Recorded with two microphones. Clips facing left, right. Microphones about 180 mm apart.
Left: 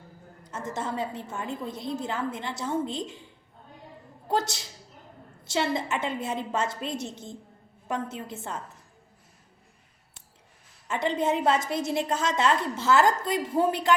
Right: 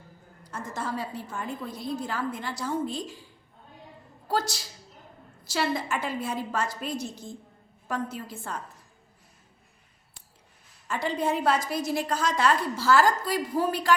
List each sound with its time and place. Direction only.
0.4 s a woman's voice: 25° left (ahead or behind)
4.3 s a woman's voice: 20° left (ahead or behind)
10.8 s a woman's voice: 20° left (ahead or behind)